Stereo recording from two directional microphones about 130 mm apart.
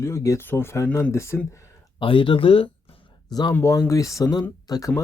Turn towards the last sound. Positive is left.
turn(degrees=30)  # may be behind; listen again after turning